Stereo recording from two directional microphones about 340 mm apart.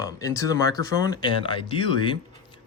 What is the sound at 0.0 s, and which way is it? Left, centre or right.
Speech, centre.